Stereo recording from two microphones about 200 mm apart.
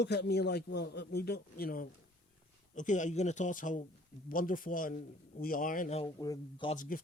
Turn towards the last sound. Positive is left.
turn(degrees=45)  # may be behind; listen again after turning